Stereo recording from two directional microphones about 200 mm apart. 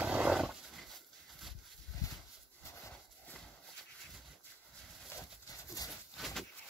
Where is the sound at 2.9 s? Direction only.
5° left (ahead or behind).